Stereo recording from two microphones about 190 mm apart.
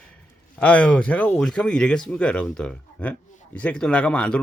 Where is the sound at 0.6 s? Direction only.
5° left (ahead or behind).